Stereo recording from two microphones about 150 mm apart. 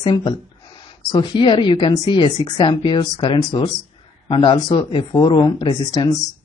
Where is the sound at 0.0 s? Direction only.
30° left (ahead or behind).